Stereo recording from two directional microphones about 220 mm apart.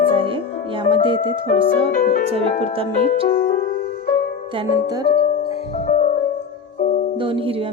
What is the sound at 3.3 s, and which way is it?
Music, 45° left (ahead or behind).